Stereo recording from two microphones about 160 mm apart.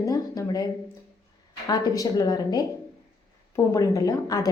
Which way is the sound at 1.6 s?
25° left (ahead or behind).